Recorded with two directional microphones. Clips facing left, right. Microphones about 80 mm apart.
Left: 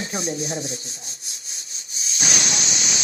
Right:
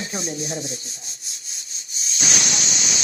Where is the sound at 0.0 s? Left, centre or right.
Left.